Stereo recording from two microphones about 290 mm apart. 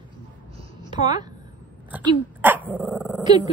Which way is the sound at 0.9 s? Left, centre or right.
Centre.